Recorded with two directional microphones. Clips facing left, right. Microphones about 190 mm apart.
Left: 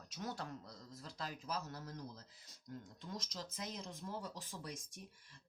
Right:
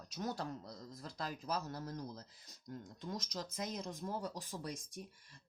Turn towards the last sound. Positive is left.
turn(degrees=-35)  # may be behind; listen again after turning